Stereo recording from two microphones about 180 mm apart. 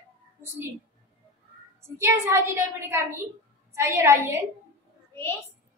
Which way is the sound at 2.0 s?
15° right (ahead or behind).